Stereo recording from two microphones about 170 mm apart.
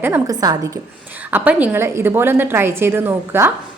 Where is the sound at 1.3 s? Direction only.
10° right (ahead or behind).